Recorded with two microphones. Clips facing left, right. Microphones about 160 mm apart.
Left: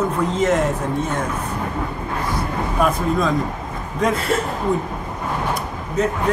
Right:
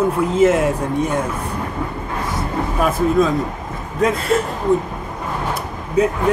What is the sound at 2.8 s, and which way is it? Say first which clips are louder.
Speech: right 3 dB; centre (ahead or behind).